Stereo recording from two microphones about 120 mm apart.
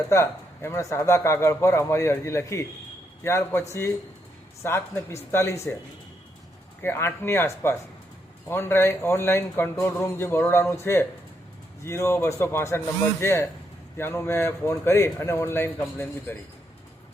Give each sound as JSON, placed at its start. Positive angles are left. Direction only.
{"t": 0.1, "sound": "speech", "side_deg": 25}
{"t": 6.8, "sound": "speech", "side_deg": 20}